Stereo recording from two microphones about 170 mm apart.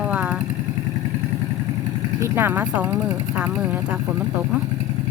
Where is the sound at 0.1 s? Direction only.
5° right (ahead or behind).